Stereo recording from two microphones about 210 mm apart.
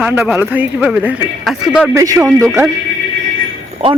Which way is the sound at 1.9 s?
15° right (ahead or behind).